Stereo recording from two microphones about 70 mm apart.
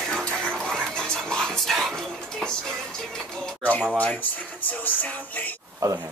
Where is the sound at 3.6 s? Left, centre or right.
Left.